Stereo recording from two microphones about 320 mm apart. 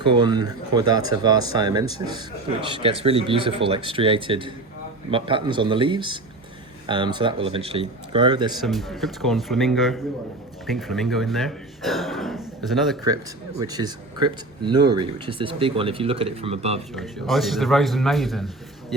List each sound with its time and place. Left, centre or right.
0.0 s speech: centre
8.6 s speech: centre
13.6 s speech: centre
16.9 s speech: centre